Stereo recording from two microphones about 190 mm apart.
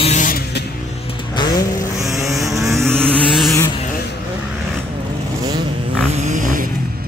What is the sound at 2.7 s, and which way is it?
Vehicle, 15° right (ahead or behind).